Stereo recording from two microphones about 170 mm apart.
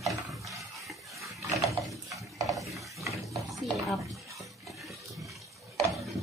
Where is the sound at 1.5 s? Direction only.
20° right (ahead or behind).